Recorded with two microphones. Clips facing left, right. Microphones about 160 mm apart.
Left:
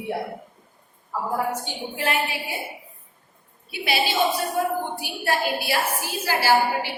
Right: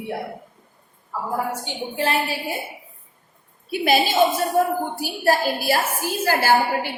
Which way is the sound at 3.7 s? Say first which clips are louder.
Right 6 dB; 45° right (ahead or behind).